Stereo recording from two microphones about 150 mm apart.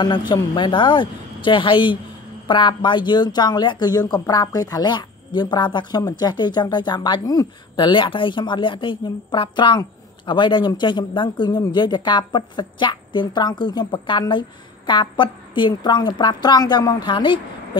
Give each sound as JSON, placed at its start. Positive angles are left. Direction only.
{"t": 0.3, "sound": "speech", "side_deg": 30}